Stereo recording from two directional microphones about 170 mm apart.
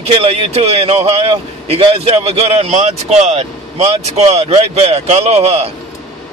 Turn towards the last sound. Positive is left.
turn(degrees=-40)  # may be behind; listen again after turning